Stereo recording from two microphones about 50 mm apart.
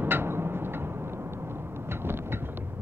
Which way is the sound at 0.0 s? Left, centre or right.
Right.